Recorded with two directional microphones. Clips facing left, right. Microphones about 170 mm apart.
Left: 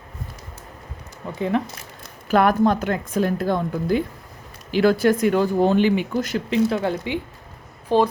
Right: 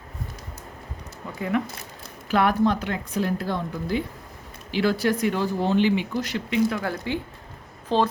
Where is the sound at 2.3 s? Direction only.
45° left (ahead or behind).